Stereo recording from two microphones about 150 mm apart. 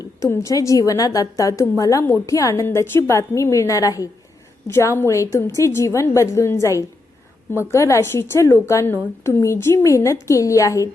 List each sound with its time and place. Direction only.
0.0 s a woman's voice: 20° left (ahead or behind)